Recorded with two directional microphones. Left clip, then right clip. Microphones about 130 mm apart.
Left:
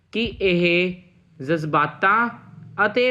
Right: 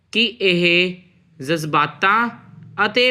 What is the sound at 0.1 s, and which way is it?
Speech, 25° right (ahead or behind).